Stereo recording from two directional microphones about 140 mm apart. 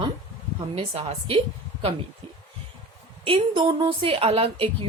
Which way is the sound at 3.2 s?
40° right (ahead or behind).